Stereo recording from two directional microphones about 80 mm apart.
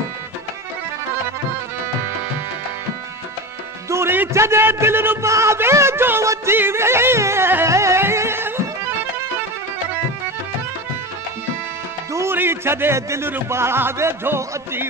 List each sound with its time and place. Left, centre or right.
3.9 s music: right
12.1 s music: right
12.4 s speech: right